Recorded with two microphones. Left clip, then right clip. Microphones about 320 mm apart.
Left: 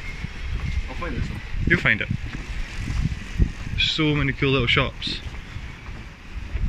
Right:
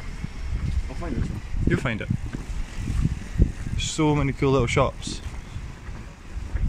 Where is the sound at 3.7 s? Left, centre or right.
Right.